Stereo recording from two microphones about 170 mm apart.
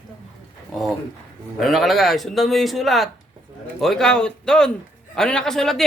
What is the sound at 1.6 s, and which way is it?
Speech, centre (ahead or behind).